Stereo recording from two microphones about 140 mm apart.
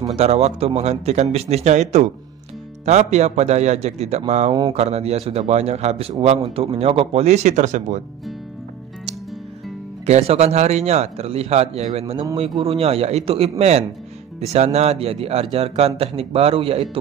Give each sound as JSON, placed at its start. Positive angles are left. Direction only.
{"t": 0.1, "sound": "a man's voice", "side_deg": -50}
{"t": 10.0, "sound": "a man's voice", "side_deg": -50}